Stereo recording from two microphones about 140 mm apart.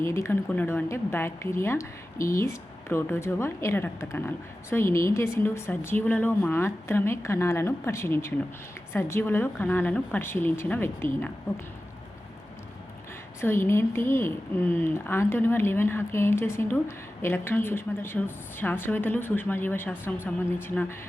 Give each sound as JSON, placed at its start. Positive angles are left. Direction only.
{"t": 0.0, "sound": "a woman's voice", "side_deg": 20}
{"t": 13.4, "sound": "speech", "side_deg": 15}